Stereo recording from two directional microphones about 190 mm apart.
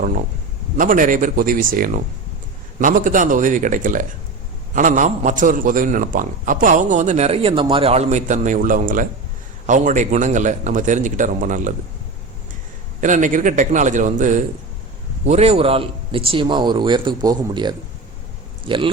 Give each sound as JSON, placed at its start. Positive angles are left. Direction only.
{"t": 0.8, "sound": "a man's voice", "side_deg": -45}
{"t": 13.0, "sound": "a man's voice", "side_deg": -40}